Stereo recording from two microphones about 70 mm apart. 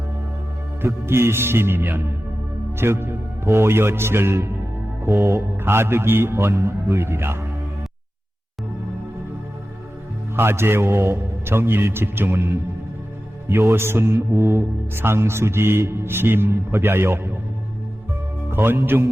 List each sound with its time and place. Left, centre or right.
0.8 s a man's voice: right
10.3 s a man's voice: right
18.5 s a man's voice: right